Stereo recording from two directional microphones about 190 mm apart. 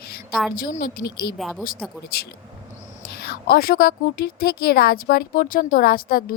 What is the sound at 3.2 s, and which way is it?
A woman's voice, 55° left (ahead or behind).